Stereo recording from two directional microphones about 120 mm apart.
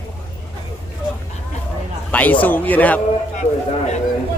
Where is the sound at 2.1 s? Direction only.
15° left (ahead or behind).